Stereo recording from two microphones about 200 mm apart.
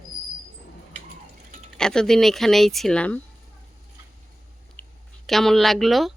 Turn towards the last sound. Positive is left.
turn(degrees=0)  # may be behind; listen again after turning